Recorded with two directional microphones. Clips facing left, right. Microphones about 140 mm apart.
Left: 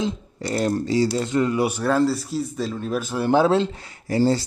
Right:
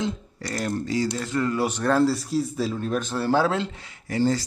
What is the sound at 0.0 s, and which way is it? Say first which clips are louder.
A man's voice: left 3 dB; 30° left (ahead or behind).